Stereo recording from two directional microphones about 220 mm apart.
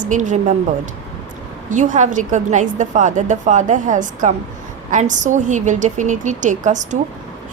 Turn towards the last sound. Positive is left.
turn(degrees=-35)  # may be behind; listen again after turning